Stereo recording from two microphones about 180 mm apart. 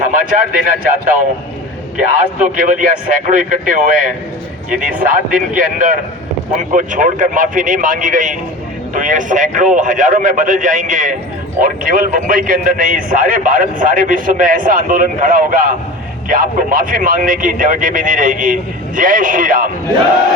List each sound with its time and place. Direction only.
0.0 s a man's voice: 50° right (ahead or behind)